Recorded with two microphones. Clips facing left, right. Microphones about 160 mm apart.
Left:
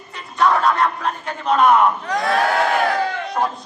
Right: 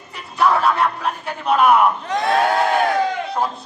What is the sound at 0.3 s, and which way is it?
Speech, 5° right (ahead or behind).